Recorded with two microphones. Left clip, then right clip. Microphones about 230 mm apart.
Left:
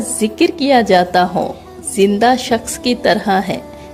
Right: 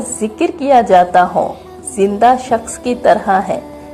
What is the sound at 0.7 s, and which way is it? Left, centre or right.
A woman's voice, left.